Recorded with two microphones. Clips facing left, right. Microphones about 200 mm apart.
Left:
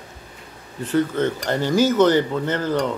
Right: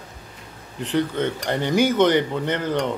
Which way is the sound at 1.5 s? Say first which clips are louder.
Left 1 dB; 20° right (ahead or behind).